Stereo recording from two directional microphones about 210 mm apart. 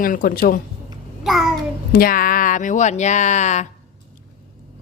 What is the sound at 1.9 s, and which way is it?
Speech, 45° left (ahead or behind).